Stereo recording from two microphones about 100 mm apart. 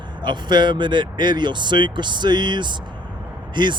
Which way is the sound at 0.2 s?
50° right (ahead or behind).